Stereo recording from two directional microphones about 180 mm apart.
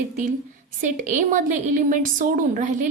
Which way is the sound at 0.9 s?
45° right (ahead or behind).